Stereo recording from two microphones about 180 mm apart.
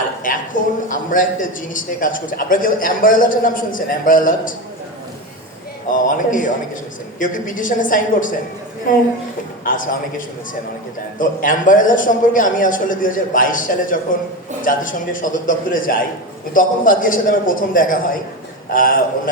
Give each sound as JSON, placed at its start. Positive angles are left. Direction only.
{"t": 0.2, "sound": "a man's voice", "side_deg": 50}
{"t": 5.9, "sound": "a man's voice", "side_deg": 45}
{"t": 9.6, "sound": "a man's voice", "side_deg": 50}